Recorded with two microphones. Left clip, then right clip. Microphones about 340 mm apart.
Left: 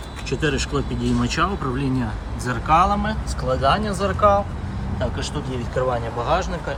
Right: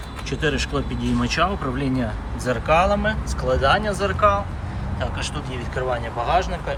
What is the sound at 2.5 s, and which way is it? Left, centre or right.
Speech, centre.